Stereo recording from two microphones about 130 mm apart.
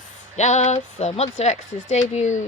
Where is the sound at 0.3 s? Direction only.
60° left (ahead or behind).